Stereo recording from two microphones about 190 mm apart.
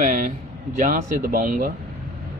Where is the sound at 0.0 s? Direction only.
45° right (ahead or behind).